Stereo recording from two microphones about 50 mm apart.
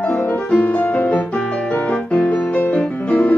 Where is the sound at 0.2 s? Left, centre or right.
Left.